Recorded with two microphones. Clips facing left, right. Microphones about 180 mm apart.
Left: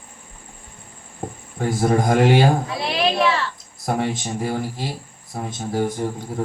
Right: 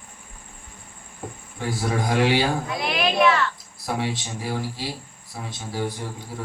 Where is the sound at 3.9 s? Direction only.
50° left (ahead or behind).